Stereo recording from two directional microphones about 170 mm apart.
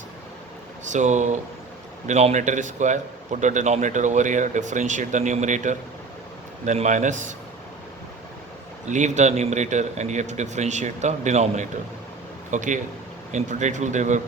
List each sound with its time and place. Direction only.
0.9 s a man's voice: 45° right (ahead or behind)
8.9 s a man's voice: 45° right (ahead or behind)